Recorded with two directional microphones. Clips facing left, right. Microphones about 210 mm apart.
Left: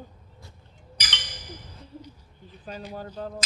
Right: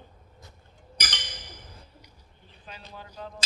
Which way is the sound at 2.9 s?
45° left (ahead or behind).